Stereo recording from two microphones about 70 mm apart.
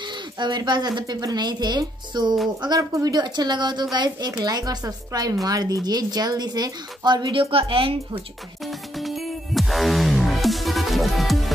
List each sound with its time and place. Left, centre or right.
0.0 s speech: right
2.8 s speech: right
3.1 s speech: right
4.4 s a woman's voice: right
8.6 s music: centre